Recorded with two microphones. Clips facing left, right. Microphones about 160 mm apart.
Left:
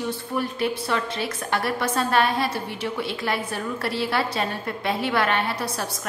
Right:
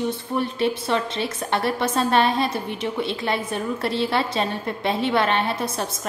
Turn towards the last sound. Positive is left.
turn(degrees=-25)  # may be behind; listen again after turning